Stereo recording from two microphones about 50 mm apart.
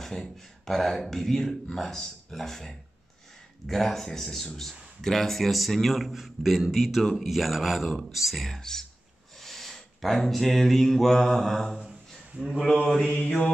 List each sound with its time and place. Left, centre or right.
0.7 s a man's voice: centre
12.7 s speech: centre